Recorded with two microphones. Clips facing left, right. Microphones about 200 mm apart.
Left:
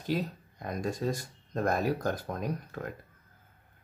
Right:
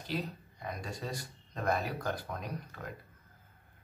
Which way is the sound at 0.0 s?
45° left (ahead or behind).